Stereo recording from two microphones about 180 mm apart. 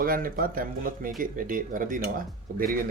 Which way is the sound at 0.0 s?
55° right (ahead or behind).